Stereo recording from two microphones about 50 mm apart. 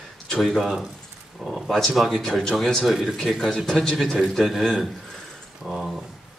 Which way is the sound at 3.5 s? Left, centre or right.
Centre.